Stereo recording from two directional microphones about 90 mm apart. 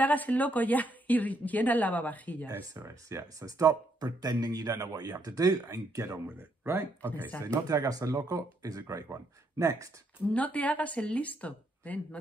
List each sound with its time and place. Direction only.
0.0 s a woman's voice: 20° left (ahead or behind)
2.9 s speech: 35° right (ahead or behind)
6.2 s speech: 25° right (ahead or behind)
7.4 s speech: 40° right (ahead or behind)
10.3 s a woman's voice: 15° left (ahead or behind)